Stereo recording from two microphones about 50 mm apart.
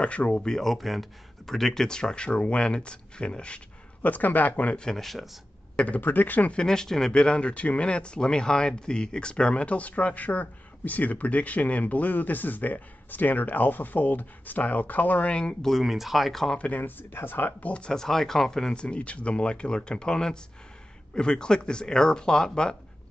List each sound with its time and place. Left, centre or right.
0.0 s speech: left
4.1 s speech: left
4.7 s speech: centre
5.9 s speech: left
6.5 s speech: centre
15.6 s speech: centre
16.5 s speech: left
17.1 s speech: left
17.6 s speech: left